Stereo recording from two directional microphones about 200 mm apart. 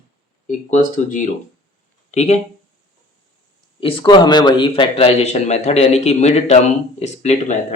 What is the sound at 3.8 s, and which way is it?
A man's voice, 25° left (ahead or behind).